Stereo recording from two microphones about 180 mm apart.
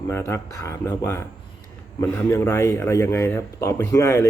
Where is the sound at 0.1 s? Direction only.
15° left (ahead or behind).